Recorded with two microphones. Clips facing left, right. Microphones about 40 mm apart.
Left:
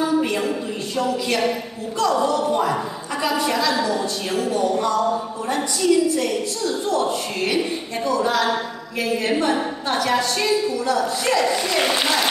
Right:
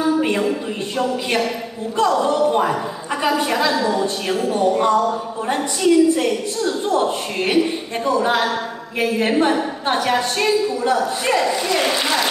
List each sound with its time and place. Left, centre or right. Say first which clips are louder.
2.4 s a woman's voice: right 3 dB; right
4.7 s music: right 4 dB; right
5.8 s a woman's voice: right 4 dB; right
9.8 s a woman's voice: right 2 dB; right
11.4 s speech: right 1 dB; centre